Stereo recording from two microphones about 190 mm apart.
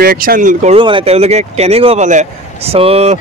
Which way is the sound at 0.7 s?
25° right (ahead or behind).